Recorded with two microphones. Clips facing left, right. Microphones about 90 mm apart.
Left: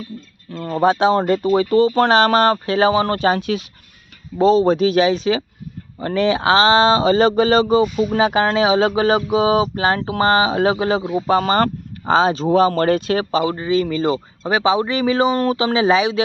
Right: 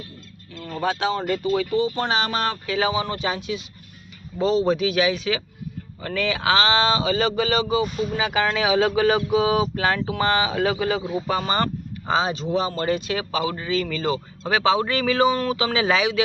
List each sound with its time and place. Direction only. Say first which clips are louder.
0.5 s speech: left 9 dB; 40° left (ahead or behind)
4.4 s speech: left 6 dB; 40° left (ahead or behind)
11.3 s speech: left 8 dB; 45° left (ahead or behind)
13.6 s speech: left 7 dB; 25° left (ahead or behind)